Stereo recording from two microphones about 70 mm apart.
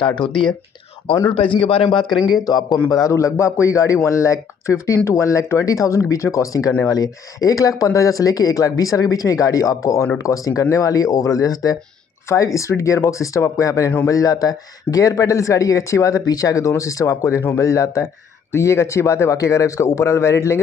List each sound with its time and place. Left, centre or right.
2.1 s speech: centre
2.4 s speech: left
12.3 s speech: left